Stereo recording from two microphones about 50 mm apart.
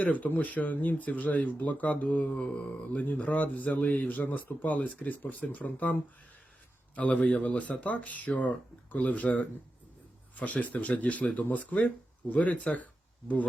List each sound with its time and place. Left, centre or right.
0.0 s speech: left
3.0 s speech: left